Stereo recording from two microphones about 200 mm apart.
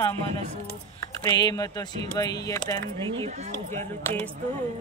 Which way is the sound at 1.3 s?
20° left (ahead or behind).